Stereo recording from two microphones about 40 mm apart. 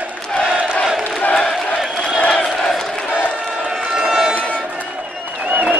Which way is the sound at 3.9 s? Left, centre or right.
Centre.